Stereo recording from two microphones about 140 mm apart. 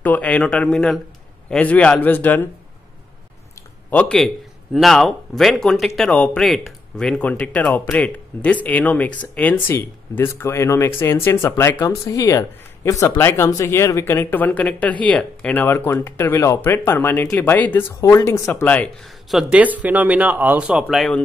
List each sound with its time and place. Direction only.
0.0 s speech: 10° left (ahead or behind)
3.9 s speech: 10° left (ahead or behind)
19.3 s speech: 10° right (ahead or behind)
20.8 s speech: 5° left (ahead or behind)